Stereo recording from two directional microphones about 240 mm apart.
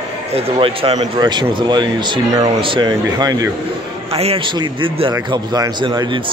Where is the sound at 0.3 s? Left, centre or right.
Right.